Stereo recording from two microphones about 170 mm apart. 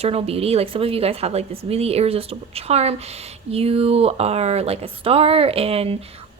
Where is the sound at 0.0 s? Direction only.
35° right (ahead or behind).